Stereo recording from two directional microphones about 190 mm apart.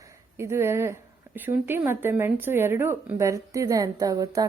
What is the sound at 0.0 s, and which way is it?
Speech, 15° right (ahead or behind).